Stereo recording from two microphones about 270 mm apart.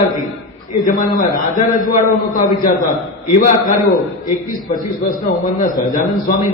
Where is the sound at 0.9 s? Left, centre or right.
Left.